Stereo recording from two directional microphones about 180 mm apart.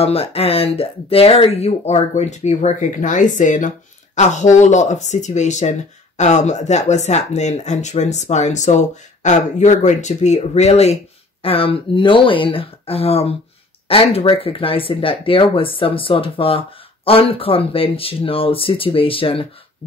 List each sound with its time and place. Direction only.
0.0 s speech: 35° left (ahead or behind)